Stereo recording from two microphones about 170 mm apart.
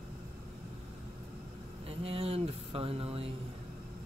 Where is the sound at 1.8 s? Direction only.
35° right (ahead or behind).